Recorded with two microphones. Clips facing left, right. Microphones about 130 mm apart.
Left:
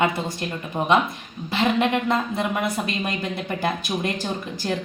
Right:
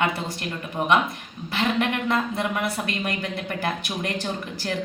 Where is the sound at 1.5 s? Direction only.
20° left (ahead or behind).